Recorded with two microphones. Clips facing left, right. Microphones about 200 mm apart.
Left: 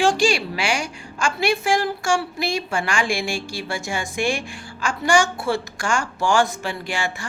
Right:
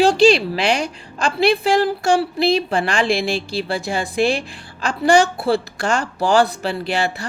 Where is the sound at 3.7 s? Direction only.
35° right (ahead or behind).